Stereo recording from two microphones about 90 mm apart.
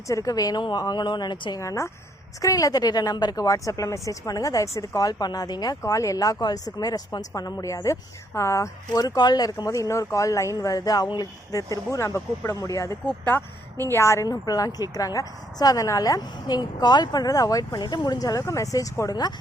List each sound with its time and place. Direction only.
0.1 s speech: 40° left (ahead or behind); by 1.5 s 55° left (ahead or behind)
1.5 s a woman's voice: 35° left (ahead or behind)
8.9 s speech: 45° left (ahead or behind)
11.5 s a woman's voice: 35° left (ahead or behind)
13.1 s speech: 20° left (ahead or behind)
13.9 s a woman's voice: 30° left (ahead or behind)
14.3 s speech: 40° left (ahead or behind)